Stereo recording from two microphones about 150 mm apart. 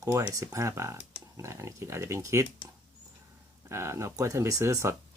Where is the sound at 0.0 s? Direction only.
20° right (ahead or behind).